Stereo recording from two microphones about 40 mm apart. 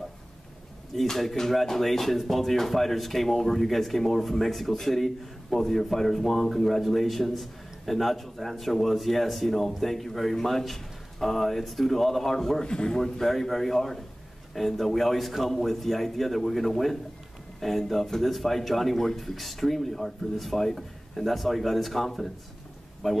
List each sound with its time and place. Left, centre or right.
0.9 s speech: centre
12.6 s a man's voice: centre